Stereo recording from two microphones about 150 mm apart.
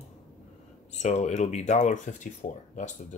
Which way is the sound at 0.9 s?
50° left (ahead or behind).